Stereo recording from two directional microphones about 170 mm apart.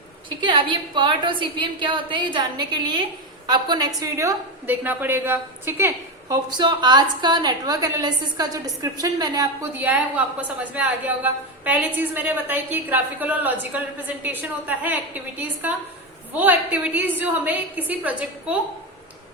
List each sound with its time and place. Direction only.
0.3 s a woman's voice: 30° right (ahead or behind)
9.7 s a woman's voice: 10° right (ahead or behind)